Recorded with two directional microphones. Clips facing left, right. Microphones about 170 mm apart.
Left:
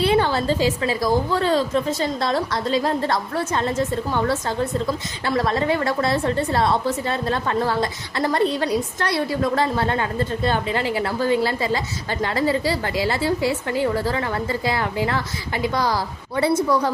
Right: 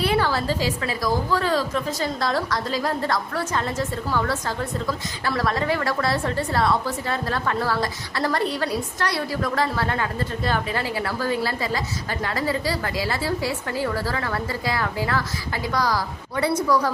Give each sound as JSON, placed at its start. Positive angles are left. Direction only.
{"t": 0.0, "sound": "a woman's voice", "side_deg": 25}